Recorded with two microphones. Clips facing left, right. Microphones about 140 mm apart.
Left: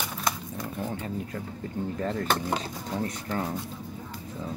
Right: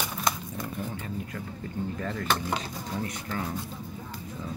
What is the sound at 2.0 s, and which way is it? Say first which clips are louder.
Speech: left 3 dB; 35° left (ahead or behind).